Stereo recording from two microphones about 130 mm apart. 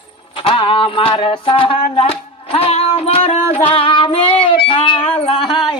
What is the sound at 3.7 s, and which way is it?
Child singing, 40° left (ahead or behind).